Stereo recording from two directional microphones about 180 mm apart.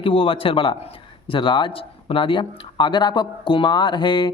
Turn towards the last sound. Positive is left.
turn(degrees=25)  # may be behind; listen again after turning